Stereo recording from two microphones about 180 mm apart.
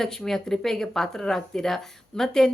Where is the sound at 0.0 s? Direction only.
Centre (ahead or behind).